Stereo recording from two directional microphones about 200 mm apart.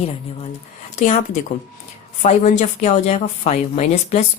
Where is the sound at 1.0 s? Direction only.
35° left (ahead or behind).